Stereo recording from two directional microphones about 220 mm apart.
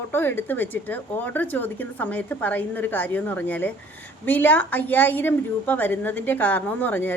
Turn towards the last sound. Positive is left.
turn(degrees=10)  # may be behind; listen again after turning